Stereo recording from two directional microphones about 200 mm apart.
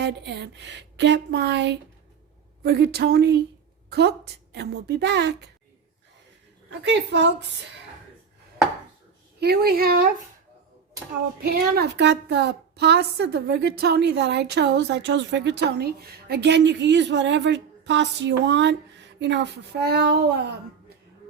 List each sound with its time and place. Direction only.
0.0 s a woman's voice: 60° right (ahead or behind)
6.8 s speech: 60° right (ahead or behind)
9.4 s speech: 50° right (ahead or behind)
11.4 s speech: 55° right (ahead or behind)